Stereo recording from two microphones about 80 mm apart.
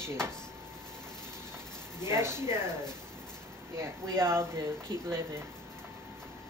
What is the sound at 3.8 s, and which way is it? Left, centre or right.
Speech, right.